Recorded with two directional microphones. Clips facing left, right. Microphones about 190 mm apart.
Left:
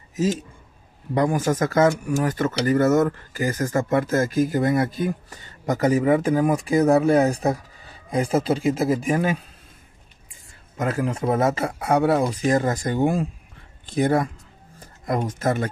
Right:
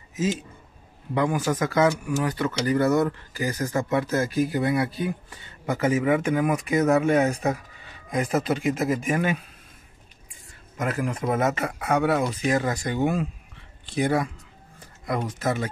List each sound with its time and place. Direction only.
0.1 s a man's voice: 40° left (ahead or behind)
10.8 s speech: 25° left (ahead or behind)
13.9 s speech: 50° left (ahead or behind)